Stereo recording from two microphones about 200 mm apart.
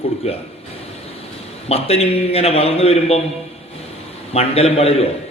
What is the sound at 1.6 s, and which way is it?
A man's voice, 30° left (ahead or behind).